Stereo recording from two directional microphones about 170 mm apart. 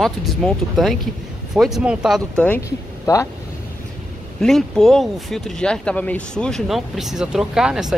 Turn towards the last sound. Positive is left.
turn(degrees=-5)  # may be behind; listen again after turning